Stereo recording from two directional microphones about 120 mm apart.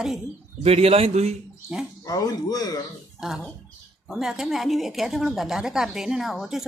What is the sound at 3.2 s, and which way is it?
Speech, 5° right (ahead or behind).